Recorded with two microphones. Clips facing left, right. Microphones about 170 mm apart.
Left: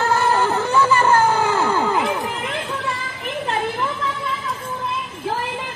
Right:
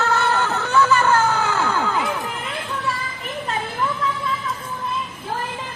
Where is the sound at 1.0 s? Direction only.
30° left (ahead or behind).